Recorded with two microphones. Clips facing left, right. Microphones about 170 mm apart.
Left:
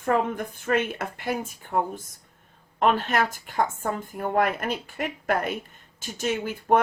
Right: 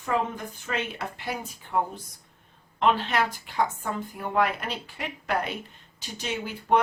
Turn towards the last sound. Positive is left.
turn(degrees=50)  # may be behind; listen again after turning